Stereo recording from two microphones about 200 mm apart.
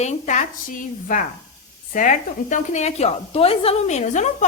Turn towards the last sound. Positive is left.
turn(degrees=35)  # may be behind; listen again after turning